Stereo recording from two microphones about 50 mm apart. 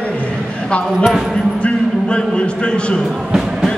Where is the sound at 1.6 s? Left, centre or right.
Centre.